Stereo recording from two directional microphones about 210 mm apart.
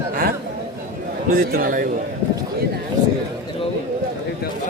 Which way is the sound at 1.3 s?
40° right (ahead or behind).